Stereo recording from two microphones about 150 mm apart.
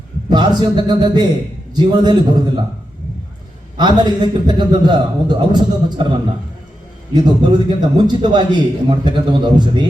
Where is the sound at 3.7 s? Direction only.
30° right (ahead or behind).